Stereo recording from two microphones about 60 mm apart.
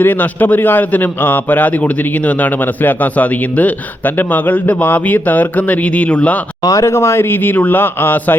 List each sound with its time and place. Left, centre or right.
0.0 s a man's voice: left
6.6 s speech: left
6.8 s speech: left